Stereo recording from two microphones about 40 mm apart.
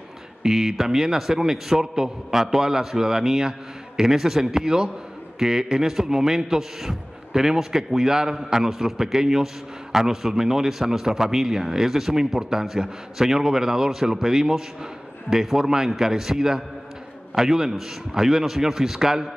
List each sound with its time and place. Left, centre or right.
0.4 s a man's voice: centre